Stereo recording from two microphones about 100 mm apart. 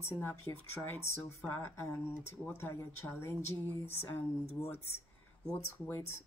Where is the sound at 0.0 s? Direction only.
25° left (ahead or behind).